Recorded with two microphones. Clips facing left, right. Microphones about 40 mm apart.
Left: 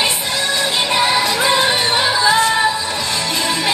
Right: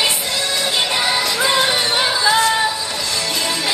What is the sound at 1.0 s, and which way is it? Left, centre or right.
Music, left.